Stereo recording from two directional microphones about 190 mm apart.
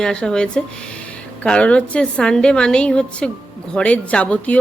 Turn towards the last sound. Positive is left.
turn(degrees=5)  # may be behind; listen again after turning